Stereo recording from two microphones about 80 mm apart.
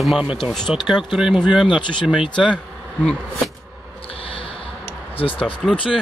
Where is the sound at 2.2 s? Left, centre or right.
Left.